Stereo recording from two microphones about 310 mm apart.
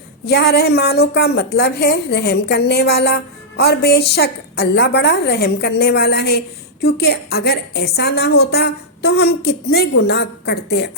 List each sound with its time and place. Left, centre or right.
0.3 s a woman's voice: left